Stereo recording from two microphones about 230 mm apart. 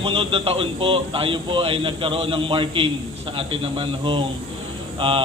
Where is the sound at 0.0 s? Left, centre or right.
Right.